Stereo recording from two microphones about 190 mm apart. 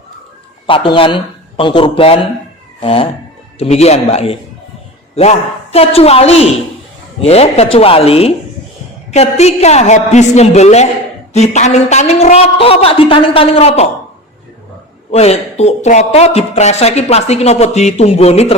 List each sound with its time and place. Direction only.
0.7 s a woman's voice: 25° left (ahead or behind)
5.7 s a woman's voice: 30° left (ahead or behind)
15.1 s a woman's voice: 35° left (ahead or behind)